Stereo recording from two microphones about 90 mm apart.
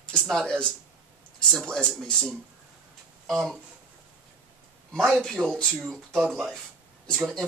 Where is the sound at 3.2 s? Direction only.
5° left (ahead or behind).